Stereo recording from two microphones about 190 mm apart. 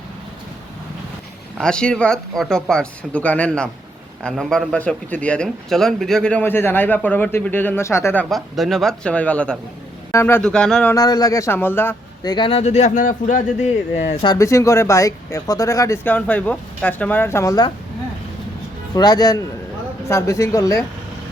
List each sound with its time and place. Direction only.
1.5 s a man's voice: 5° left (ahead or behind)
10.9 s a man's voice: 20° left (ahead or behind)
12.3 s speech: 25° left (ahead or behind)
14.3 s a man's voice: 15° left (ahead or behind)
18.9 s a man's voice: 20° left (ahead or behind)